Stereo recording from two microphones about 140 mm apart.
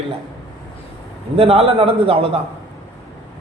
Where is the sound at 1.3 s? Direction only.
40° right (ahead or behind).